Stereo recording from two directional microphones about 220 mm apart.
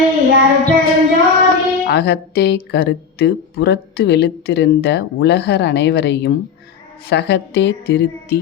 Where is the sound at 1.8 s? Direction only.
45° left (ahead or behind).